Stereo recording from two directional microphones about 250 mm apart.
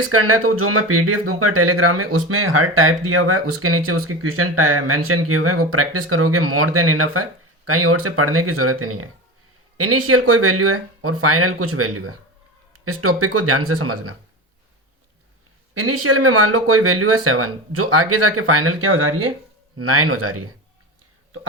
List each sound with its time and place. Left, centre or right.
0.0 s speech: right
15.7 s speech: right